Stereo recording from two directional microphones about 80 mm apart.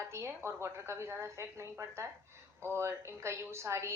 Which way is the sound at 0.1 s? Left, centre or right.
Right.